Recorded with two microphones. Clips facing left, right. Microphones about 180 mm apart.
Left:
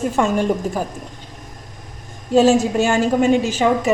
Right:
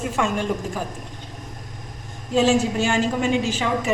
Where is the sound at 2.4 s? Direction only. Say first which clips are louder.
Left 5 dB; 45° left (ahead or behind).